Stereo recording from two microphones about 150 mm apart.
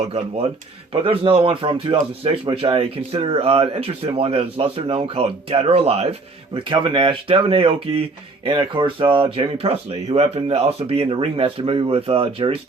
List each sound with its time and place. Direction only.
1.0 s speech: 35° right (ahead or behind)